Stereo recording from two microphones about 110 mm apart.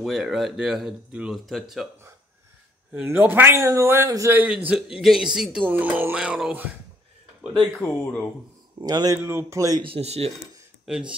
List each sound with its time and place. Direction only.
0.0 s speech: centre (ahead or behind)
2.9 s a man's voice: 15° right (ahead or behind)
5.7 s speech: 15° right (ahead or behind)
6.1 s speech: 5° right (ahead or behind)
7.8 s speech: 15° left (ahead or behind)
8.8 s speech: 35° right (ahead or behind)
9.2 s a man's voice: 20° right (ahead or behind)
9.9 s speech: 70° right (ahead or behind)
10.9 s speech: 10° right (ahead or behind)